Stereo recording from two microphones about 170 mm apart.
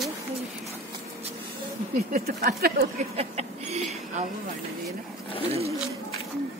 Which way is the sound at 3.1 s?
40° right (ahead or behind).